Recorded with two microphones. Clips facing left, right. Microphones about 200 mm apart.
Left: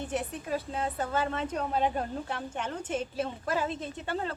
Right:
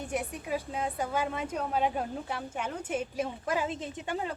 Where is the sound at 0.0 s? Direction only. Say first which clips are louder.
Left 1 dB; 10° right (ahead or behind).